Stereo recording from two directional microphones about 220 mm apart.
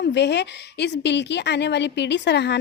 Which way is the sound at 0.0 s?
50° left (ahead or behind).